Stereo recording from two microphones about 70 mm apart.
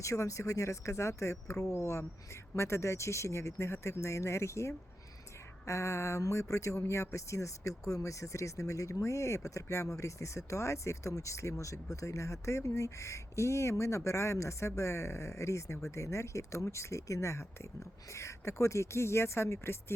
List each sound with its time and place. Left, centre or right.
0.0 s speech: left